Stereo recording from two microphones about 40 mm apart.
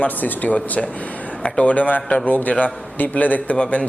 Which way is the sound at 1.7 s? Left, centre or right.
Left.